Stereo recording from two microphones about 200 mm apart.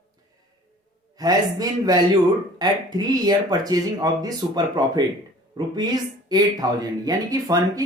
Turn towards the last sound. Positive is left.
turn(degrees=-20)  # may be behind; listen again after turning